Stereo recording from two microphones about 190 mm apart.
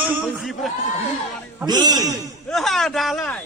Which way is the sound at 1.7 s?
20° right (ahead or behind).